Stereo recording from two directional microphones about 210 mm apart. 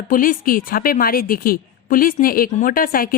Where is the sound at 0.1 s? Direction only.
40° left (ahead or behind).